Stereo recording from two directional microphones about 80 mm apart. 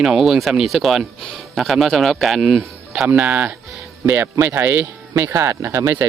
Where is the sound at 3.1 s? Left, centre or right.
Right.